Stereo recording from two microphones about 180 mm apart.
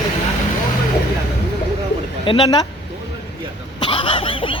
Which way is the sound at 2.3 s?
20° left (ahead or behind).